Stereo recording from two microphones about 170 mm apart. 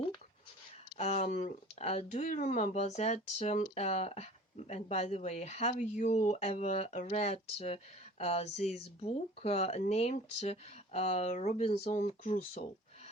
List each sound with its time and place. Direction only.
0.9 s speech: 40° left (ahead or behind)